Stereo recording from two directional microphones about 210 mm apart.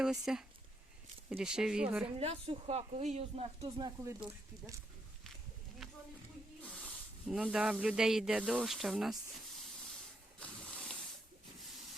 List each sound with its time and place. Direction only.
0.0 s speech: centre (ahead or behind)
2.1 s speech: 30° right (ahead or behind)
7.3 s speech: 5° right (ahead or behind)